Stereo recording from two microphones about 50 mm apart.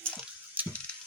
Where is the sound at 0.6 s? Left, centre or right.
Right.